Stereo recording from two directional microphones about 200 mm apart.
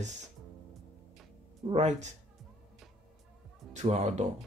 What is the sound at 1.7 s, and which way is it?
Speech, 35° right (ahead or behind).